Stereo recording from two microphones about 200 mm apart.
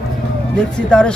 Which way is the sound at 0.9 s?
5° left (ahead or behind).